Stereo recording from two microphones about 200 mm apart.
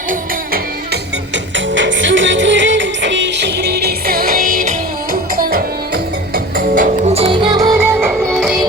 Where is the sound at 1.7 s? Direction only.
70° right (ahead or behind).